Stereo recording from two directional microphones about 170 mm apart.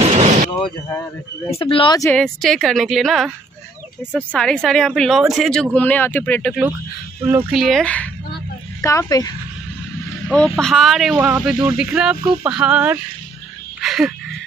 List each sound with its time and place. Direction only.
0.0 s a sound: 35° right (ahead or behind)
1.5 s speech: 30° left (ahead or behind)
2.1 s speech: centre (ahead or behind)
7.2 s speech: 10° right (ahead or behind); by 8.1 s 5° left (ahead or behind)
8.8 s speech: 20° left (ahead or behind)
10.2 s speech: 10° left (ahead or behind); by 13.0 s 10° right (ahead or behind)
13.7 s wheeze: centre (ahead or behind)